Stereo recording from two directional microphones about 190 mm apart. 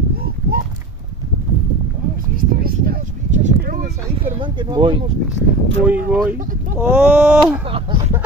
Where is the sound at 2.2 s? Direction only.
50° right (ahead or behind).